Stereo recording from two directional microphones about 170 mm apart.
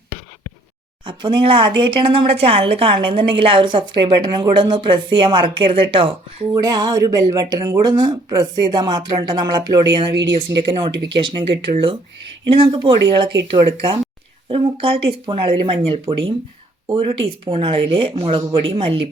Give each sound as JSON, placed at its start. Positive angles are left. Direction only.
{"t": 1.0, "sound": "a woman's voice", "side_deg": -30}
{"t": 14.4, "sound": "speech", "side_deg": -30}